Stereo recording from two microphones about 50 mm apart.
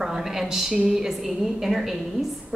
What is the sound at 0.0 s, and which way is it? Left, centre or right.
A woman's voice, centre.